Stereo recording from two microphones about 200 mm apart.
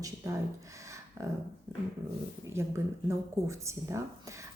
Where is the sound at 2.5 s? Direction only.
15° right (ahead or behind).